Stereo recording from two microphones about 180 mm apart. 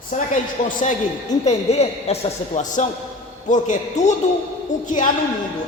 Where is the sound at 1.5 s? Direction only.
35° left (ahead or behind).